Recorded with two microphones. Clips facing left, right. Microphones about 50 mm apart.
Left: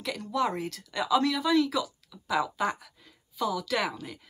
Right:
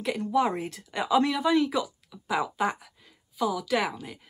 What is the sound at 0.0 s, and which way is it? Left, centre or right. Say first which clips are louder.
Speech: right 4 dB; right.